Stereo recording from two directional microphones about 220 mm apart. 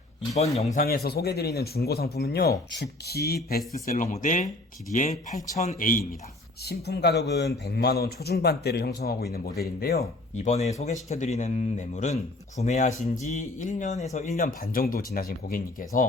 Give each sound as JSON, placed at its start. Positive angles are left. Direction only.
{"t": 0.3, "sound": "speech", "side_deg": 30}
{"t": 0.8, "sound": "a man's voice", "side_deg": 45}
{"t": 5.5, "sound": "a man's voice", "side_deg": 35}
{"t": 10.3, "sound": "a man's voice", "side_deg": 30}